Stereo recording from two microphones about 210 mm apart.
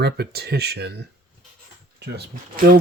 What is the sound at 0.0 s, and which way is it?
Speech, 50° right (ahead or behind).